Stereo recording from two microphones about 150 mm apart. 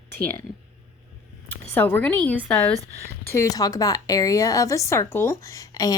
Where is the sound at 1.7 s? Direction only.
10° left (ahead or behind).